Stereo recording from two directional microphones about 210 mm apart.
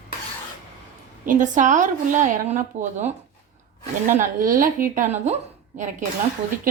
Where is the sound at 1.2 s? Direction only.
40° right (ahead or behind).